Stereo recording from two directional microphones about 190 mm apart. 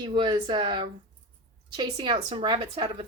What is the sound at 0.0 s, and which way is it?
Speech, 25° right (ahead or behind).